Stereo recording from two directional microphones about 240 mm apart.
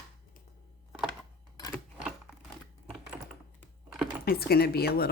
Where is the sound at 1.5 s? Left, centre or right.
Centre.